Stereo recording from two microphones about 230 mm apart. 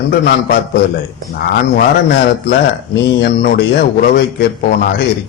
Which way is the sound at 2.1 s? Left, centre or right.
Left.